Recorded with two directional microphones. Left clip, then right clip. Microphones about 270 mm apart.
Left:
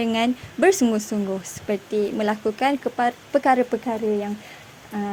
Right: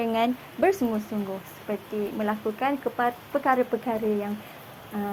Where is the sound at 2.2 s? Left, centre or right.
Left.